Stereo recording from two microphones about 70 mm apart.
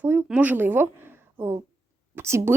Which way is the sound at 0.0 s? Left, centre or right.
Right.